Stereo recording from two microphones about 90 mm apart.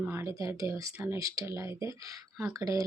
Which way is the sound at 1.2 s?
35° right (ahead or behind).